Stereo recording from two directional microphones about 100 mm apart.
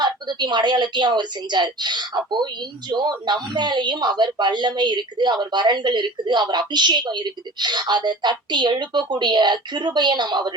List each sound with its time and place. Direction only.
0.0 s a woman's voice: 45° right (ahead or behind)